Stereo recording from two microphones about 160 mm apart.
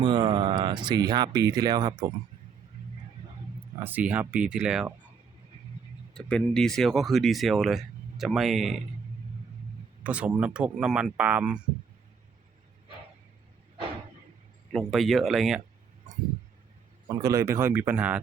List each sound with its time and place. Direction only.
0.0 s speech: 30° right (ahead or behind)
3.8 s speech: 10° right (ahead or behind)
6.1 s speech: 5° left (ahead or behind)
10.0 s speech: 10° right (ahead or behind)
14.7 s speech: centre (ahead or behind)
17.1 s speech: 20° right (ahead or behind)